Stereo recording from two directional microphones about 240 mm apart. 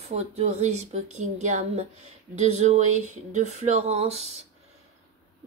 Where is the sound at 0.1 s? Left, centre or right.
Right.